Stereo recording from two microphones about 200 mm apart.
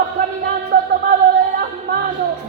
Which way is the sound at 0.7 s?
45° right (ahead or behind).